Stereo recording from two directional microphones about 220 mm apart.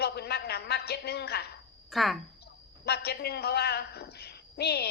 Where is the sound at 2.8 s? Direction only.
45° left (ahead or behind).